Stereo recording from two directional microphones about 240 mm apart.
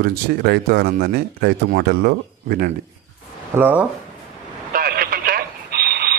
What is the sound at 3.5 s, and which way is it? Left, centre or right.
Speech, centre.